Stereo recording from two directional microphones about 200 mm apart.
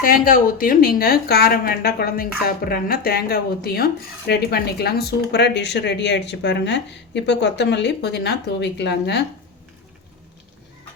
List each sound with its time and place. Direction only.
0.0 s speech: 45° left (ahead or behind)